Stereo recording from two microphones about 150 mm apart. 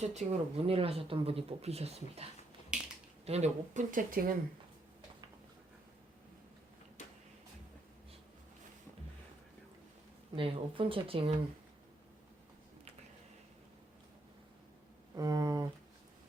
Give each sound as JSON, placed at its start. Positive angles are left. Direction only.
{"t": 0.0, "sound": "speech", "side_deg": -50}
{"t": 2.7, "sound": "finger snapping", "side_deg": -5}
{"t": 3.2, "sound": "speech", "side_deg": -45}
{"t": 10.3, "sound": "speech", "side_deg": -35}
{"t": 15.1, "sound": "a sound", "side_deg": -25}